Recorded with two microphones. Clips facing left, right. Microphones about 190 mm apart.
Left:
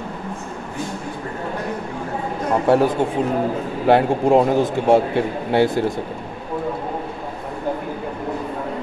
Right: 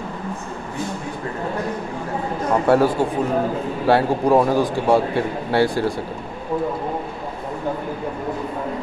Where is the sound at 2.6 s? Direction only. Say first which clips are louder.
Even; 15° left (ahead or behind).